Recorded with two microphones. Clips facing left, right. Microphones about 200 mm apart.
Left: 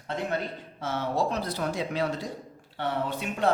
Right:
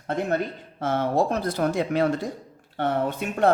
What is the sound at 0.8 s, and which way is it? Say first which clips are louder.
Speech: right 6 dB; 55° right (ahead or behind).